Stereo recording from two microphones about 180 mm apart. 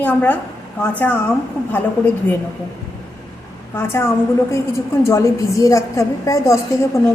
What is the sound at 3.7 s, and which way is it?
Speech, 10° left (ahead or behind).